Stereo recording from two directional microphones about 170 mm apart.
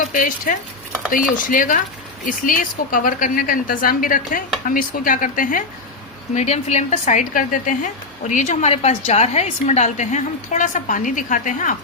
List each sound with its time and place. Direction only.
0.0 s a woman's voice: 50° left (ahead or behind)